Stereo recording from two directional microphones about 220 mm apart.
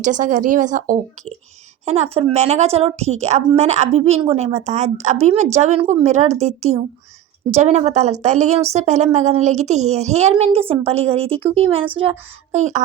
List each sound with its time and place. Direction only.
0.0 s a woman's voice: 35° right (ahead or behind)